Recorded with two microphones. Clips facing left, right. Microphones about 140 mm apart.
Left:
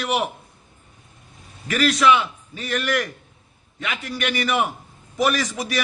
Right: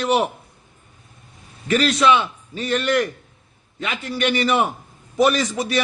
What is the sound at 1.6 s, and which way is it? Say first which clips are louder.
A man's voice: right 1 dB; 25° right (ahead or behind).